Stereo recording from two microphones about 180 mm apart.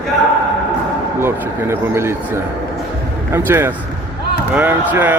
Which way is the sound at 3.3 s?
15° right (ahead or behind).